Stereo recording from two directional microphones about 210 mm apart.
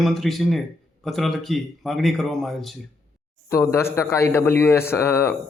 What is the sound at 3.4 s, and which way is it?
A man's voice, 10° left (ahead or behind).